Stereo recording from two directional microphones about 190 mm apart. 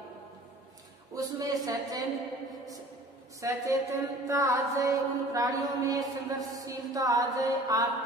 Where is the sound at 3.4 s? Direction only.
15° right (ahead or behind).